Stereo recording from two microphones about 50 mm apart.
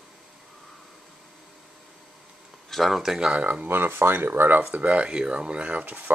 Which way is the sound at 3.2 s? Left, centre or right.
Right.